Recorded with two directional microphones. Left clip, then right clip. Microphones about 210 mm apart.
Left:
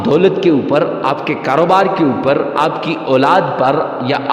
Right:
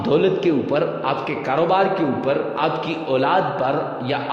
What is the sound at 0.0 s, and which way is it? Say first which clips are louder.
A man's voice: left 6 dB; 35° left (ahead or behind).